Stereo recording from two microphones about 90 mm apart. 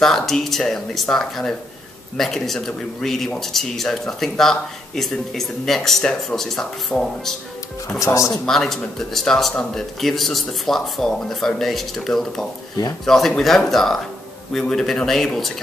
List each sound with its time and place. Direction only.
0.0 s speech: 5° left (ahead or behind)
8.0 s speech: 35° left (ahead or behind)
8.5 s speech: 5° left (ahead or behind)